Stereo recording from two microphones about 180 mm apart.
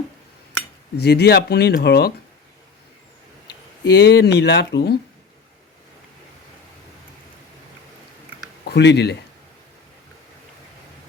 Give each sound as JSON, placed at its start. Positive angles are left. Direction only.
{"t": 0.9, "sound": "speech", "side_deg": 65}
{"t": 3.9, "sound": "speech", "side_deg": 65}
{"t": 8.6, "sound": "speech", "side_deg": 75}